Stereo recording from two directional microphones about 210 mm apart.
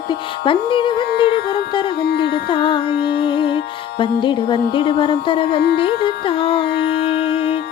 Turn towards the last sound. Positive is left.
turn(degrees=25)  # may be behind; listen again after turning